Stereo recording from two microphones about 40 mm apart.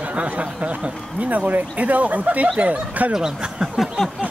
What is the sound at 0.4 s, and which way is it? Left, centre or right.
Speech, right.